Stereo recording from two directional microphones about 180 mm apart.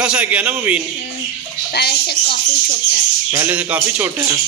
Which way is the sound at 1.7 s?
65° left (ahead or behind).